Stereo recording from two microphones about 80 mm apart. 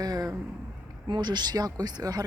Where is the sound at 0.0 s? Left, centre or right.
Right.